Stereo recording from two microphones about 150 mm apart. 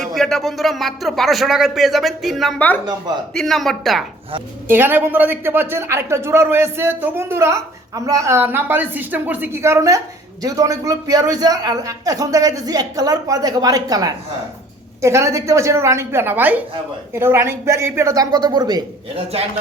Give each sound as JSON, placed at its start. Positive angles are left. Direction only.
{"t": 0.0, "sound": "speech", "side_deg": 0}
{"t": 4.7, "sound": "a man's voice", "side_deg": -15}